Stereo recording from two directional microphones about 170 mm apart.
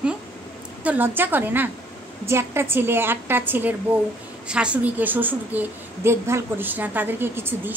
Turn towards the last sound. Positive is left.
turn(degrees=-15)  # may be behind; listen again after turning